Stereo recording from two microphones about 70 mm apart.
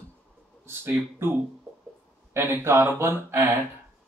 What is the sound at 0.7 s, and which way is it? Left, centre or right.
Speech, right.